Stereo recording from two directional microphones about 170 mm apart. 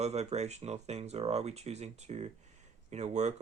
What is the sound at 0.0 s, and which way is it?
Speech, 40° right (ahead or behind).